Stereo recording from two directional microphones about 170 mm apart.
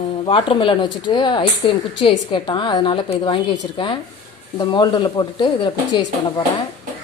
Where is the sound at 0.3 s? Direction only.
30° left (ahead or behind).